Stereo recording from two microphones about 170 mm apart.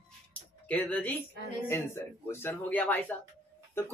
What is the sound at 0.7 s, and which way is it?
Speech, 10° left (ahead or behind).